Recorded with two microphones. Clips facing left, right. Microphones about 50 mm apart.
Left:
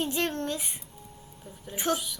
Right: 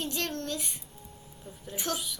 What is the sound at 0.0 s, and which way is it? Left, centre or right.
Speech, centre.